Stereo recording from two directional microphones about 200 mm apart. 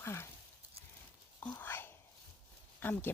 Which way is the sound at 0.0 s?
15° left (ahead or behind).